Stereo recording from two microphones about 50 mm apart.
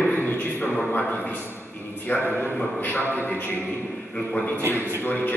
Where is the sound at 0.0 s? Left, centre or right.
Left.